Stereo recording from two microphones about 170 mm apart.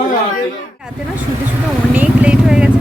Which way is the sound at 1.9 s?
10° right (ahead or behind).